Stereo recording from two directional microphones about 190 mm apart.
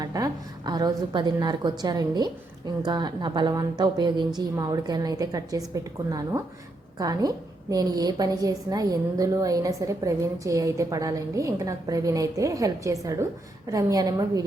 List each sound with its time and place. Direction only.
0.0 s a woman's voice: 20° right (ahead or behind)